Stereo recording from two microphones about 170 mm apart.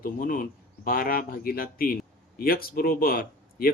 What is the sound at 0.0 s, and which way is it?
Speech, 60° left (ahead or behind).